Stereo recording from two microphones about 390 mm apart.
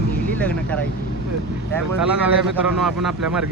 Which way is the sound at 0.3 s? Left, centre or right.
Centre.